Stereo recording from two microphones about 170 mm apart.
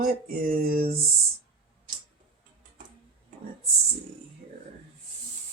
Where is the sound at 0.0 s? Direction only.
55° right (ahead or behind).